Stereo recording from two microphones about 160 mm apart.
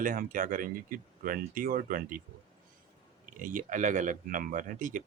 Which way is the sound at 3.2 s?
55° right (ahead or behind).